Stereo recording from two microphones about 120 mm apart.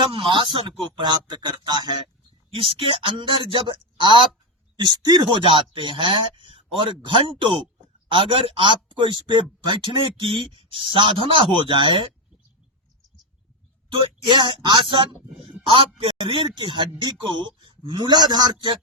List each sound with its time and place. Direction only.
0.1 s speech: 45° right (ahead or behind)
2.5 s speech: 45° right (ahead or behind)
13.9 s speech: 40° right (ahead or behind)